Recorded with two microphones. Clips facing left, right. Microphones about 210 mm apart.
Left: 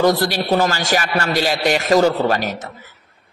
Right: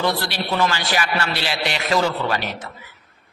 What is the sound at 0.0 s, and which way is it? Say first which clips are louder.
A man's voice: left 7 dB; 45° left (ahead or behind).